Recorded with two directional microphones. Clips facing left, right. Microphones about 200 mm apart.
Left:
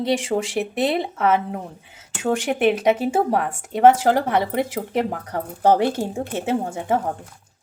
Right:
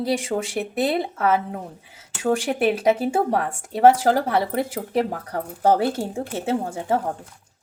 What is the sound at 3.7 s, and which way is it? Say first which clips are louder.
Speech: left 1 dB; 20° left (ahead or behind).